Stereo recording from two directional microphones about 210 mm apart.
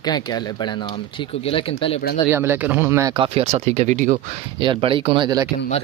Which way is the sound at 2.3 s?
10° right (ahead or behind).